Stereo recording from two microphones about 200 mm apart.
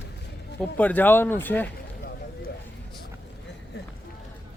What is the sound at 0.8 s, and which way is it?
Speech, 10° left (ahead or behind).